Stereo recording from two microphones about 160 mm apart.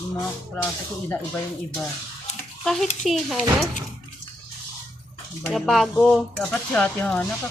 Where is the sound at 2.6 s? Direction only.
Centre (ahead or behind).